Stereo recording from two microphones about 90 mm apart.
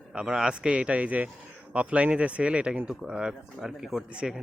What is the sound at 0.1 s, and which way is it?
Speech, 5° right (ahead or behind).